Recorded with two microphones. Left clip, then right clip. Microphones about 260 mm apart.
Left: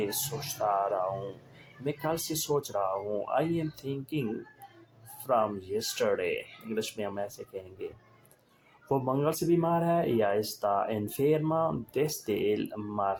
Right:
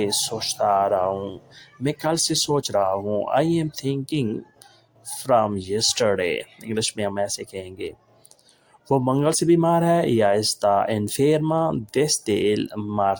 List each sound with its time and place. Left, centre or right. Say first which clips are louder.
0.1 s speech: right 11 dB; right
8.9 s speech: right 8 dB; right